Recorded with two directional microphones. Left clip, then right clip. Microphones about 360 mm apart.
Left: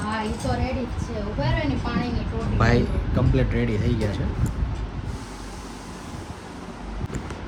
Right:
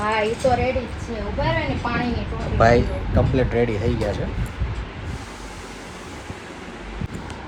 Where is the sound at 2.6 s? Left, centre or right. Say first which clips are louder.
Right 7 dB; centre.